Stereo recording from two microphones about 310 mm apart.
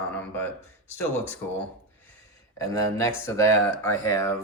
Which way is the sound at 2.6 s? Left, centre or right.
Centre.